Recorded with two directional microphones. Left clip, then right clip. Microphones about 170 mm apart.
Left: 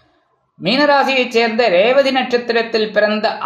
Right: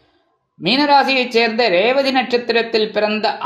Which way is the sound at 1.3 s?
20° right (ahead or behind).